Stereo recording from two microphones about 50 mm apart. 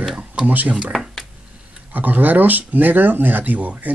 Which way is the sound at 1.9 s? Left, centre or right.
Right.